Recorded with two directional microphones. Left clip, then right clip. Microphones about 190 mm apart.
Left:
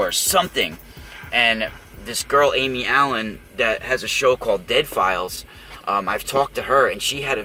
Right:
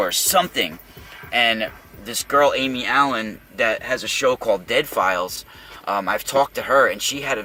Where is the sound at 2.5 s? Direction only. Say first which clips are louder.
Left 1 dB; 10° right (ahead or behind).